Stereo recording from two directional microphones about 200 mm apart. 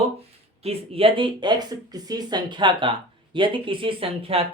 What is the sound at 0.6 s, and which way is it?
Speech, 30° right (ahead or behind).